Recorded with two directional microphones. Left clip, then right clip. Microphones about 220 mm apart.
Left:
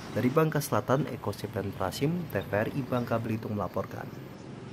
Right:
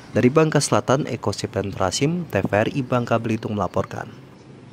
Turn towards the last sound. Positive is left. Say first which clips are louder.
# right 9 dB
turn(degrees=-35)  # may be behind; listen again after turning